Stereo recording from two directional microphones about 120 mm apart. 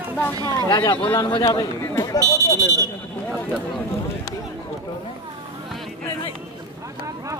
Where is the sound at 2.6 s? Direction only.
25° right (ahead or behind).